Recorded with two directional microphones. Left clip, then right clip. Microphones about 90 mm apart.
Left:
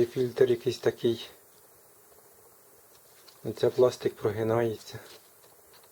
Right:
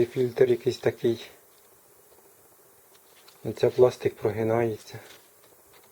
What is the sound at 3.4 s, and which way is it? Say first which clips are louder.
Speech: right 3 dB; 30° right (ahead or behind).